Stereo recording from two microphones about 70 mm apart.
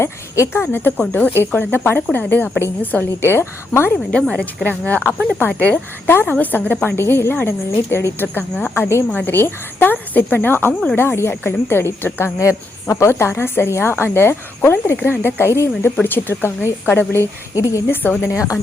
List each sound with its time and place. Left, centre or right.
0.0 s speech: left
0.9 s speech: left
1.3 s a woman's voice: left
4.1 s speech: centre
6.1 s a woman's voice: left
12.4 s a woman's voice: left
17.5 s a woman's voice: left
17.9 s speech: left
18.3 s a woman's voice: left